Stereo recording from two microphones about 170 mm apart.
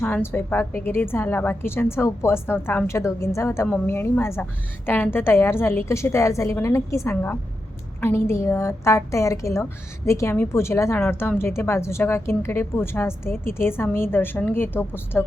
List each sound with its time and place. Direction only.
0.0 s a woman's voice: 15° left (ahead or behind)